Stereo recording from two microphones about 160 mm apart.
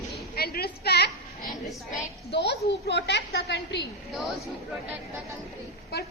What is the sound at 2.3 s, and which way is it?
A woman's voice, 90° left.